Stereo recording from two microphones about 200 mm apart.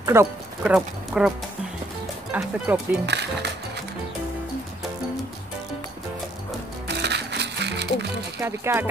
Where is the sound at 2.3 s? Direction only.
10° right (ahead or behind).